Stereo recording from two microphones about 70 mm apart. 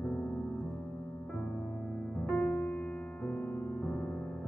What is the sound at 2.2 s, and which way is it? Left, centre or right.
Music, centre.